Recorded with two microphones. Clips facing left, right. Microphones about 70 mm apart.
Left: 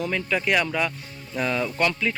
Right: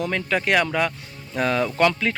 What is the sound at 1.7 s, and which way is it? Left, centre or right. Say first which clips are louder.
Speech: right 4 dB; right.